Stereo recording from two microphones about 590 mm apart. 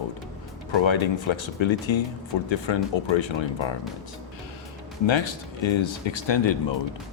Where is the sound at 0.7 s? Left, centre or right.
Left.